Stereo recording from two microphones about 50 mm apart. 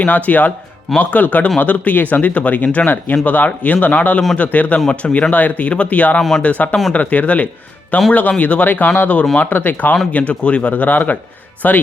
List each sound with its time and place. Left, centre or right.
0.3 s speech: left
9.4 s speech: left